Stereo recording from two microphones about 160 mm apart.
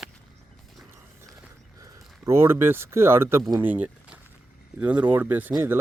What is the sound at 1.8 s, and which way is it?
Speech, 15° right (ahead or behind).